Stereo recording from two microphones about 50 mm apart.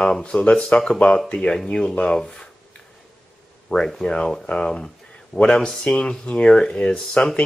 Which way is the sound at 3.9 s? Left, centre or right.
Centre.